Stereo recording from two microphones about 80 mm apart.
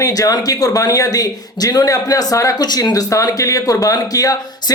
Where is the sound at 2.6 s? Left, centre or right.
Left.